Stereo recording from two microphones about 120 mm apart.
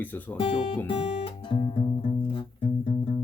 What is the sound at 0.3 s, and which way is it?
Speech, 50° left (ahead or behind).